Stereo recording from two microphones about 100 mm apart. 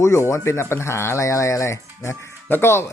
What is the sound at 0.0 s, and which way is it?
Speech, 30° left (ahead or behind).